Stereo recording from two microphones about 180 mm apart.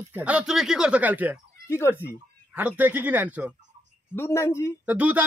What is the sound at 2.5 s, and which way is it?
Speech, 10° right (ahead or behind).